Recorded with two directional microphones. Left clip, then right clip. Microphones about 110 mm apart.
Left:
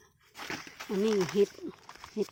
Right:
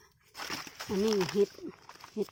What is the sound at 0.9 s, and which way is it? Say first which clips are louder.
Speech: left 1 dB; 5° left (ahead or behind).